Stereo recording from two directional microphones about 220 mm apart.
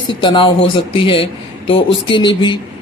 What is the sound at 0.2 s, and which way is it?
A man's voice, 20° left (ahead or behind).